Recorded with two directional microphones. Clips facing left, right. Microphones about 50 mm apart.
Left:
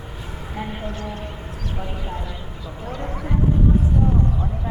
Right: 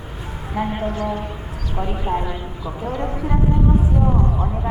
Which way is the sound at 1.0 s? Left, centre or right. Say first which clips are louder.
Right 7 dB; right.